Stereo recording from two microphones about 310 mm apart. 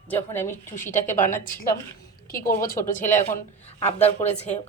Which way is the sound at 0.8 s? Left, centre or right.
Left.